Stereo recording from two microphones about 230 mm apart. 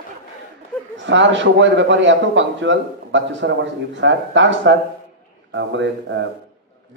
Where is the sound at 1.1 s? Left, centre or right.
Right.